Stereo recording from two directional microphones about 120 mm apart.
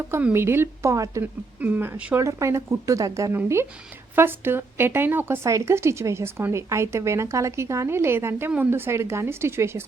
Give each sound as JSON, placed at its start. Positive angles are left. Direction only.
{"t": 0.1, "sound": "a woman's voice", "side_deg": -15}
{"t": 1.2, "sound": "speech", "side_deg": -15}
{"t": 2.1, "sound": "a woman's voice", "side_deg": -25}